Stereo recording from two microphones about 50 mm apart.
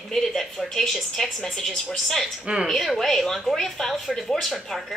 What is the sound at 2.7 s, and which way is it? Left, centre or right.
A woman's voice, centre.